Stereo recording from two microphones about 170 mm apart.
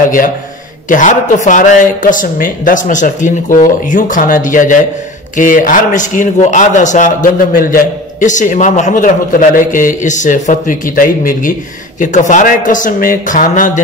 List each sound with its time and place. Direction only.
0.8 s a man's voice: 50° left (ahead or behind)